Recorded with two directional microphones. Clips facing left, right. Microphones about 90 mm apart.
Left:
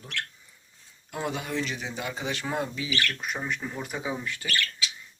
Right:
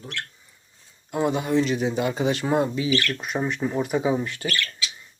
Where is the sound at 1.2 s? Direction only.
40° right (ahead or behind).